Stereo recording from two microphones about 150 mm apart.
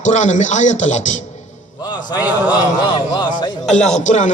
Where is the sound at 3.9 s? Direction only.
55° left (ahead or behind).